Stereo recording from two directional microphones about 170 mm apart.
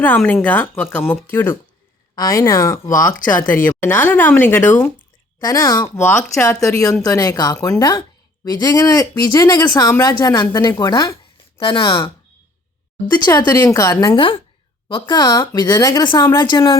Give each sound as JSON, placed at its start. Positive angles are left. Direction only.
{"t": 0.0, "sound": "speech", "side_deg": 10}